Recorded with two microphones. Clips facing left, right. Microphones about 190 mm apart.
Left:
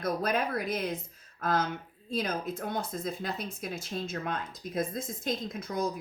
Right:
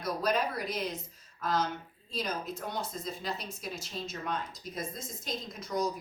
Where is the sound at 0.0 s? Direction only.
55° left (ahead or behind).